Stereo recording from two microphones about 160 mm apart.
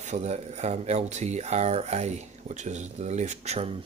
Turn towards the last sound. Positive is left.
turn(degrees=-45)  # may be behind; listen again after turning